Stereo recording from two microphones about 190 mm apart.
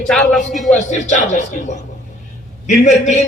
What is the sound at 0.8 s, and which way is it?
Speech, 40° left (ahead or behind).